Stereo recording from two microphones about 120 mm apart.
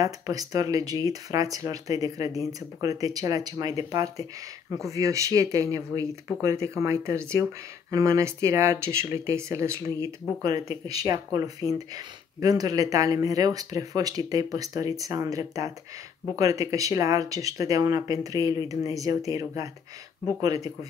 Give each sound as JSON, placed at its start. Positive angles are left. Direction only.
{"t": 0.0, "sound": "speech", "side_deg": -30}